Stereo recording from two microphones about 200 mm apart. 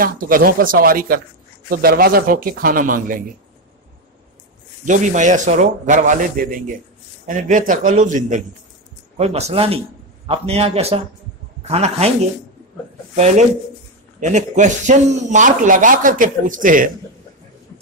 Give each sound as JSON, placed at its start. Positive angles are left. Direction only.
{"t": 0.0, "sound": "a man's voice", "side_deg": -45}
{"t": 4.8, "sound": "speech", "side_deg": -40}
{"t": 13.1, "sound": "speech", "side_deg": -35}